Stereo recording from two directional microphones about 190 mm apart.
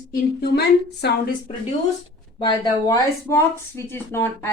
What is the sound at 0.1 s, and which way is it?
Speech, 55° left (ahead or behind).